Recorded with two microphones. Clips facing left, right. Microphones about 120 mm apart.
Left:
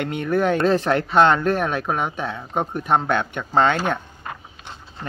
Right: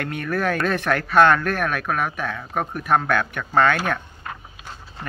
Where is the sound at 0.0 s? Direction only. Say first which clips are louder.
Left 3 dB; 20° left (ahead or behind).